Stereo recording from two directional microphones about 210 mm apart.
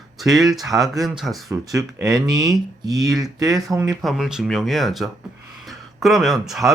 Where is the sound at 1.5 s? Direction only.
15° right (ahead or behind).